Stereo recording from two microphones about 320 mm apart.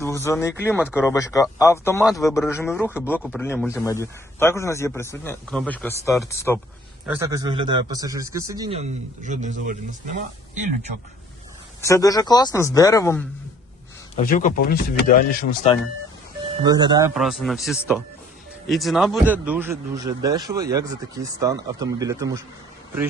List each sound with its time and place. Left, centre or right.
0.0 s a man's voice: centre
7.0 s a man's voice: centre; by 10.7 s right
11.8 s a man's voice: centre
14.3 s speech: left
16.6 s a man's voice: centre
17.2 s a man's voice: centre